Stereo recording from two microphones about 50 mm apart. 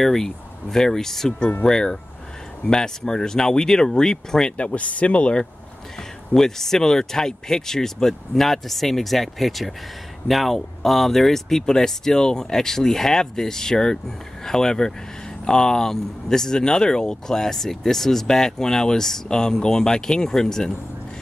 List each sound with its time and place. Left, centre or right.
0.0 s speech: centre
4.6 s speech: left
6.3 s speech: centre